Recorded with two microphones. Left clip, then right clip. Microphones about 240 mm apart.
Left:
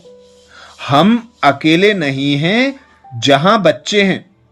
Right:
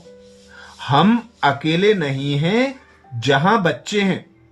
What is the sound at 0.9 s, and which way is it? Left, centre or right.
Speech, centre.